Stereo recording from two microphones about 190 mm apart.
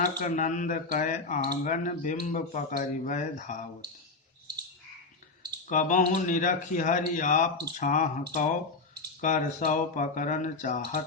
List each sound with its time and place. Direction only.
0.2 s speech: 40° left (ahead or behind)
5.6 s speech: 40° left (ahead or behind)